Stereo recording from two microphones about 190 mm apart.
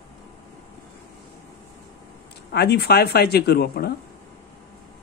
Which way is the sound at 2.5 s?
60° left (ahead or behind).